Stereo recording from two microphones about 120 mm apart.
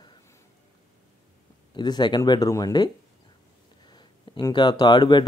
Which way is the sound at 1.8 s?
35° left (ahead or behind).